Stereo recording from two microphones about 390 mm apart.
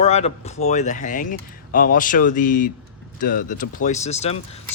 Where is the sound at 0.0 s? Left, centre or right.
Centre.